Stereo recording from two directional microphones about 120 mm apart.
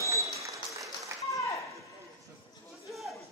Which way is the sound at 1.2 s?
25° left (ahead or behind).